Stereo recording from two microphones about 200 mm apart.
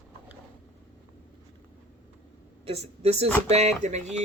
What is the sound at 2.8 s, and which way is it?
Speech, 30° right (ahead or behind).